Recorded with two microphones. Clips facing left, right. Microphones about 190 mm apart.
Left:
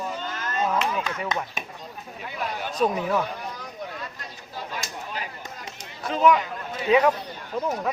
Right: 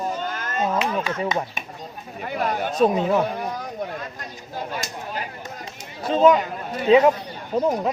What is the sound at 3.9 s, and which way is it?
Chatter, 50° right (ahead or behind).